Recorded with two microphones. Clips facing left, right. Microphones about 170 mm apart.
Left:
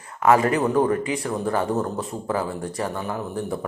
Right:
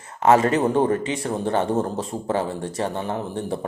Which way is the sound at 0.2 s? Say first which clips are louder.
Right 1 dB; 25° right (ahead or behind).